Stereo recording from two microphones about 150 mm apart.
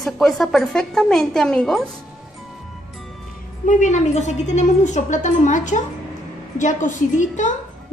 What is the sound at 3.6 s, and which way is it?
A woman's voice, 55° left (ahead or behind).